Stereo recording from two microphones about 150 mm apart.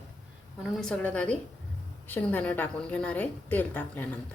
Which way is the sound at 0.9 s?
10° left (ahead or behind).